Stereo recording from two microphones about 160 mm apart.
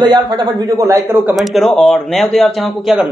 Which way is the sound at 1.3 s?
Centre (ahead or behind).